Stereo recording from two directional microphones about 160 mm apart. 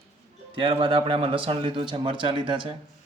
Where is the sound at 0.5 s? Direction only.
35° right (ahead or behind).